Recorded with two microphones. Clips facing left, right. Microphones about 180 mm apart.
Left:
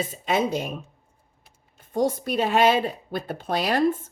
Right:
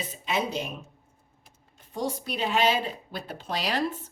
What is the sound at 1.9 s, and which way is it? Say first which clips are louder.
A woman's voice: left 7 dB; 50° left (ahead or behind).